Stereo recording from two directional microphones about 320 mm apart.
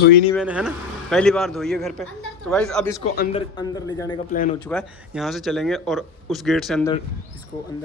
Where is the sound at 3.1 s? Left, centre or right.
Centre.